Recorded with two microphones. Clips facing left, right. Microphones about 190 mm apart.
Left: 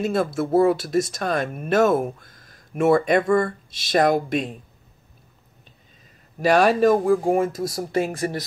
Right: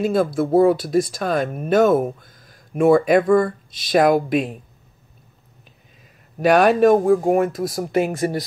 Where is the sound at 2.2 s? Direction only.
Centre (ahead or behind).